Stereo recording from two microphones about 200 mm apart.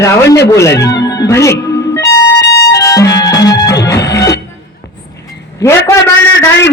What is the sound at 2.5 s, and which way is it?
Music, 15° left (ahead or behind).